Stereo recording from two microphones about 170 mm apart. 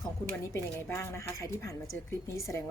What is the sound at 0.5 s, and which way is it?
Speech, 15° left (ahead or behind).